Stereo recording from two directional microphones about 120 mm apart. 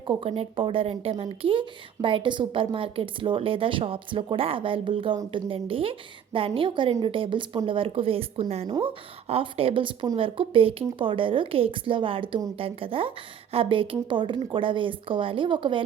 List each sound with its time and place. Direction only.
0.1 s speech: 50° right (ahead or behind)
8.6 s speech: 40° right (ahead or behind)